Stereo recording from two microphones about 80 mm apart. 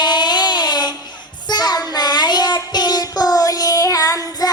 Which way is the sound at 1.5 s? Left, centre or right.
Left.